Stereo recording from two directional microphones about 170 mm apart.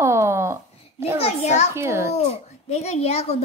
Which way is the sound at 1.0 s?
15° right (ahead or behind).